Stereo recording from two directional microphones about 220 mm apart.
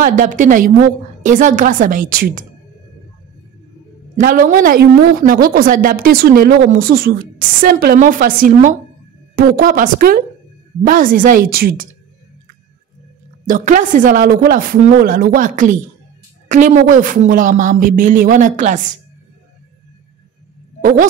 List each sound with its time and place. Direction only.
0.0 s a woman's voice: 35° right (ahead or behind)
4.2 s a woman's voice: 40° right (ahead or behind)
13.5 s a woman's voice: 35° right (ahead or behind)
20.8 s speech: 35° right (ahead or behind)